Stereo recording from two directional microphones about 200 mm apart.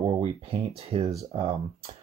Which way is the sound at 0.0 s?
30° right (ahead or behind).